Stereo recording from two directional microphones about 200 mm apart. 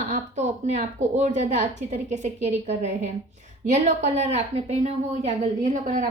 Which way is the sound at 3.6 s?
35° right (ahead or behind).